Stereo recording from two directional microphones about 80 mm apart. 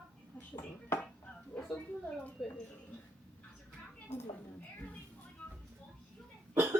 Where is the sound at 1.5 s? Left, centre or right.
Centre.